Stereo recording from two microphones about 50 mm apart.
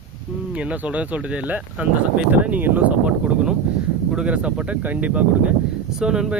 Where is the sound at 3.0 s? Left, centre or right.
Centre.